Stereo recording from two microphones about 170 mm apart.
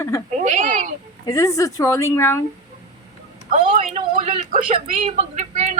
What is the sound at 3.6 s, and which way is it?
Speech, 50° right (ahead or behind).